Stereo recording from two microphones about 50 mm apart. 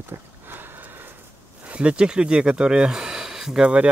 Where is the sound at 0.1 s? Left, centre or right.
Right.